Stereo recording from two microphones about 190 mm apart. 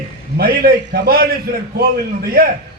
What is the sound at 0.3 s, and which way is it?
A man's voice, 55° right (ahead or behind).